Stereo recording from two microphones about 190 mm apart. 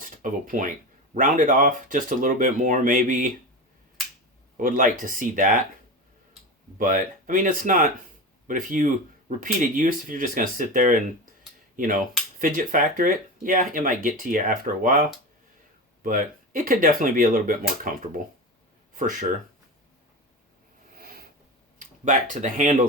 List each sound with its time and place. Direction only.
0.0 s a sound: 45° right (ahead or behind)
1.1 s speech: 45° right (ahead or behind)
4.5 s speech: 45° right (ahead or behind)
6.7 s speech: 45° right (ahead or behind)
16.0 s speech: 45° right (ahead or behind)
21.0 s a sound: 50° right (ahead or behind)
21.8 s speech: 40° right (ahead or behind)